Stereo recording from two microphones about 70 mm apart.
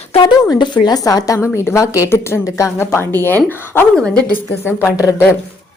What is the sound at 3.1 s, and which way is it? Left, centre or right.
A woman's voice, left.